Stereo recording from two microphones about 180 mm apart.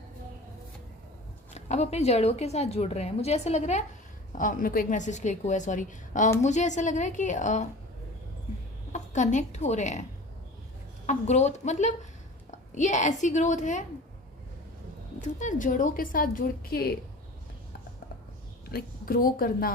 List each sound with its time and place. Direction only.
1.5 s a woman's voice: 35° left (ahead or behind)
8.9 s a woman's voice: 40° left (ahead or behind)
15.2 s a woman's voice: 45° left (ahead or behind)
18.7 s a woman's voice: 55° left (ahead or behind)